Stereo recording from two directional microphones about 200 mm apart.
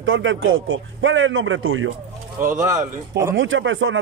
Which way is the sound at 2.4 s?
40° right (ahead or behind).